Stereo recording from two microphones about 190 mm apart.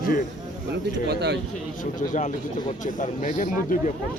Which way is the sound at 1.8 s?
40° left (ahead or behind).